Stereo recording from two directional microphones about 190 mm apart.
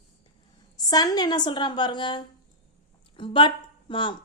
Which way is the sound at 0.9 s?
20° left (ahead or behind).